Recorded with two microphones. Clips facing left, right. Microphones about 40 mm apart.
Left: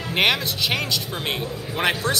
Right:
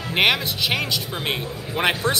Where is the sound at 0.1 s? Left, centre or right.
Centre.